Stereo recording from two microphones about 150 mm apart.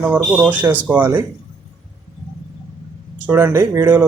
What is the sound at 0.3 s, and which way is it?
Speech, 10° right (ahead or behind).